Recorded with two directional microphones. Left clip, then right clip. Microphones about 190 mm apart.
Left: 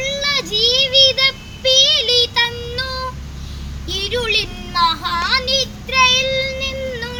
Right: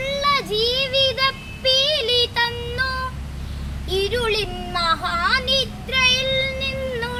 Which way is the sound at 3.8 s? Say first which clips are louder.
Left 1 dB; 15° right (ahead or behind).